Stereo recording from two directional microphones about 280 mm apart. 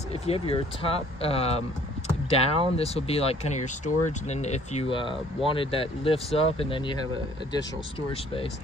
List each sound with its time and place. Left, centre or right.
0.1 s speech: left